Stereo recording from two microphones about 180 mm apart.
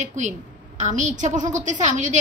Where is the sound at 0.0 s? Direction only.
40° right (ahead or behind).